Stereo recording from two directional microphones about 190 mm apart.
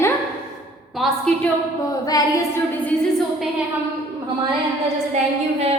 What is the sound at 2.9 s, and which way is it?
Speech, 5° left (ahead or behind).